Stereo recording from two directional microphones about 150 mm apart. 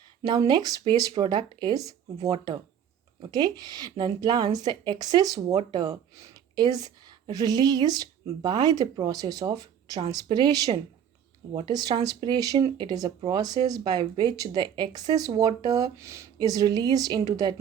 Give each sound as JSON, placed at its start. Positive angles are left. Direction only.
{"t": 0.2, "sound": "a woman's voice", "side_deg": -25}